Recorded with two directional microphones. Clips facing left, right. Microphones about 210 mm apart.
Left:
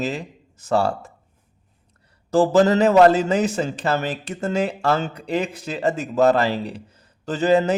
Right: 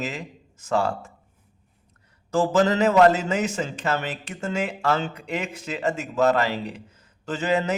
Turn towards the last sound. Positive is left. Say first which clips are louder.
# left 6 dB
turn(degrees=35)  # may be behind; listen again after turning